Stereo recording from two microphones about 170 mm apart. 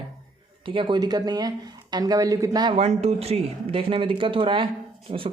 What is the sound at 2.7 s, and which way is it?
Speech, 40° right (ahead or behind).